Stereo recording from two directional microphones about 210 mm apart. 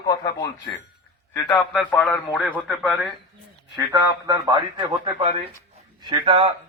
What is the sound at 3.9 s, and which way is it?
A man's voice, 15° right (ahead or behind).